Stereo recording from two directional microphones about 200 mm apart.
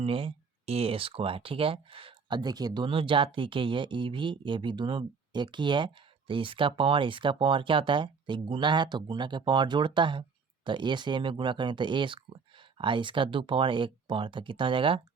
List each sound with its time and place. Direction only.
0.0 s speech: 25° right (ahead or behind)